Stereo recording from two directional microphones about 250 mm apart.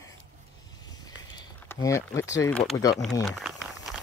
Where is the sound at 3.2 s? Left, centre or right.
Centre.